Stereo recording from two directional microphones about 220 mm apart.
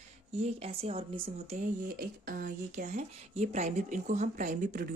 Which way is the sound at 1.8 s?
45° right (ahead or behind).